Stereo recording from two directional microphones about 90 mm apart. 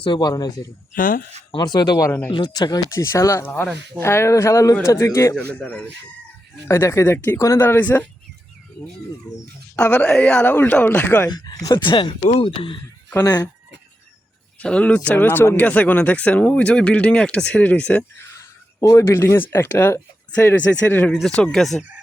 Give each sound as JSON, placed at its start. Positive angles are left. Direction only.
{"t": 0.2, "sound": "speech", "side_deg": 45}
{"t": 2.9, "sound": "speech", "side_deg": 35}
{"t": 5.5, "sound": "speech", "side_deg": 15}
{"t": 6.7, "sound": "speech", "side_deg": 30}
{"t": 7.6, "sound": "speech", "side_deg": 20}
{"t": 9.7, "sound": "speech", "side_deg": 15}
{"t": 11.3, "sound": "speech", "side_deg": 50}
{"t": 14.6, "sound": "speech", "side_deg": 15}
{"t": 18.3, "sound": "speech", "side_deg": 35}
{"t": 21.1, "sound": "speech", "side_deg": 5}